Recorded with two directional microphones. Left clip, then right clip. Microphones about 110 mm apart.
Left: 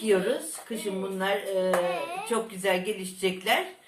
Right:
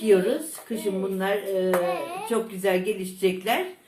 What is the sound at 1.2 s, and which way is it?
Speech, 25° left (ahead or behind).